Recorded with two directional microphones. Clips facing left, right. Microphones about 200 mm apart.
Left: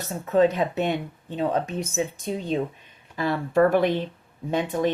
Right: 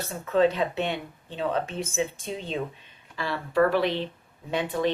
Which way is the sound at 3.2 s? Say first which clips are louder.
Left 3 dB; 45° left (ahead or behind).